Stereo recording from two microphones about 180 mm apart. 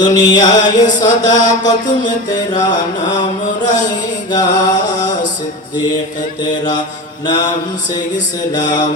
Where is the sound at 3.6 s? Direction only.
45° left (ahead or behind).